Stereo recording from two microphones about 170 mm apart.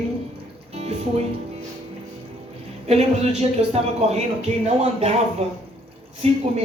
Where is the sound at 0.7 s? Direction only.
40° right (ahead or behind).